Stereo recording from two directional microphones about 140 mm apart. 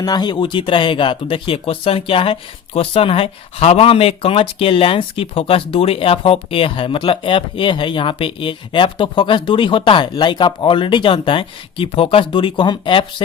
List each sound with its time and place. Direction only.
0.0 s speech: 30° left (ahead or behind)